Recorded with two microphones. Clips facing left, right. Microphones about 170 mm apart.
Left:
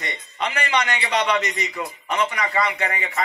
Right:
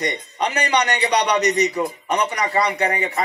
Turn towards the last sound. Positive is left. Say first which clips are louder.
# right 4 dB
turn(degrees=-40)  # may be behind; listen again after turning